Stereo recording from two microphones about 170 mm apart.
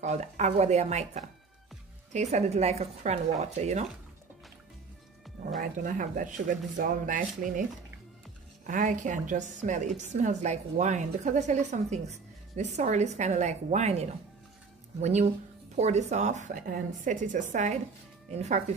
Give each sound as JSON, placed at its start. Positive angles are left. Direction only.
{"t": 0.0, "sound": "speech", "side_deg": -40}
{"t": 5.6, "sound": "a woman's voice", "side_deg": -50}
{"t": 8.6, "sound": "a woman's voice", "side_deg": -50}